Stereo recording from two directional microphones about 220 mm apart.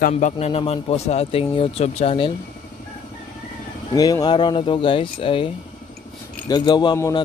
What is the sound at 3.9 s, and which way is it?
A man's voice, 15° left (ahead or behind).